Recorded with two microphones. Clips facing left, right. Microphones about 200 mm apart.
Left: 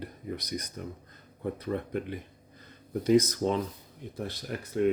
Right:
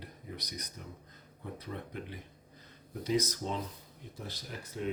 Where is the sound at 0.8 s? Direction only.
55° left (ahead or behind).